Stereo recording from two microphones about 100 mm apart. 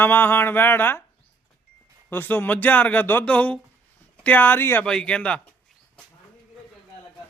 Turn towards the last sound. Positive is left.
turn(degrees=10)  # may be behind; listen again after turning